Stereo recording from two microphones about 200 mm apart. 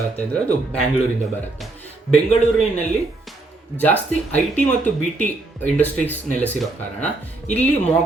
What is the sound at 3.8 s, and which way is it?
Speech, 5° left (ahead or behind).